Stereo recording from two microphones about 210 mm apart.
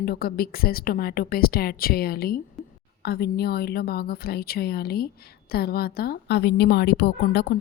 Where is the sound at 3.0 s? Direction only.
50° left (ahead or behind).